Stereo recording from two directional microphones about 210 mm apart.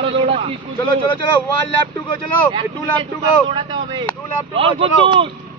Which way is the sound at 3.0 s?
25° right (ahead or behind).